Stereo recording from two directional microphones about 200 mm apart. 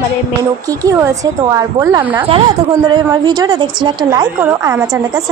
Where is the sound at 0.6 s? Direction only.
15° right (ahead or behind).